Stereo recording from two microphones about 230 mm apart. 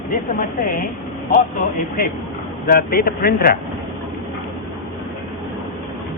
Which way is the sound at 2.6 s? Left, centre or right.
Left.